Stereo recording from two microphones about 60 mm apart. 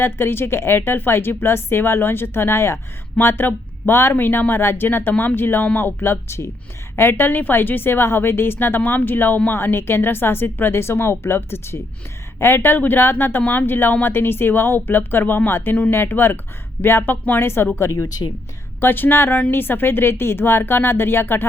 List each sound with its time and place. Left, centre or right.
0.0 s a woman's voice: left
6.9 s a woman's voice: left
17.7 s speech: left
18.8 s a woman's voice: left